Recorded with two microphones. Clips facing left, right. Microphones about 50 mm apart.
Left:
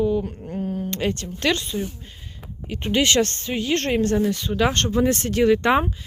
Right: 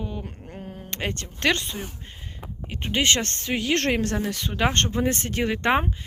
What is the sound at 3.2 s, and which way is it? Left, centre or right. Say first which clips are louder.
Speech: left 7 dB; right.